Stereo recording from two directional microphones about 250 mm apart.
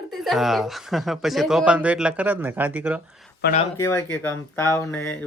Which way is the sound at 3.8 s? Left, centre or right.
Centre.